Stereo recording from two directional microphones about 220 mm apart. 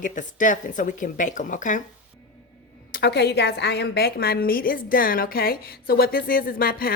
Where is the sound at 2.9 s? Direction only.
50° left (ahead or behind).